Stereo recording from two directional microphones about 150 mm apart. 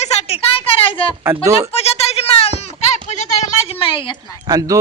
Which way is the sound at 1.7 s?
40° left (ahead or behind).